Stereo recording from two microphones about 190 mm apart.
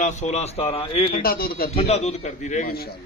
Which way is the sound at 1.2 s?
50° left (ahead or behind).